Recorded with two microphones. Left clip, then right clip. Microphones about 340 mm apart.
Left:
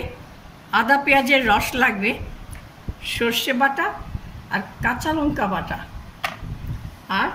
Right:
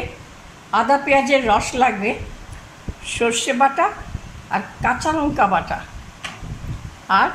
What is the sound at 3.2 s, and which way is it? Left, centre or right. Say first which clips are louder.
Speech: right 3 dB; centre.